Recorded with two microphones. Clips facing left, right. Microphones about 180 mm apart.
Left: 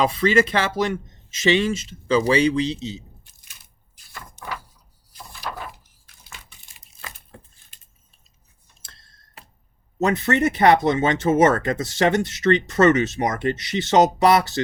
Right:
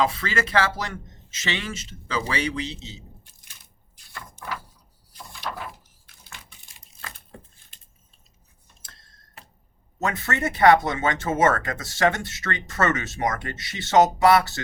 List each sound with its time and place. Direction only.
0.0 s a man's voice: 15° left (ahead or behind)
3.9 s a sound: 5° left (ahead or behind)
5.1 s door: 5° left (ahead or behind)
8.8 s tick-tock: 30° left (ahead or behind)
10.2 s speech: 25° left (ahead or behind)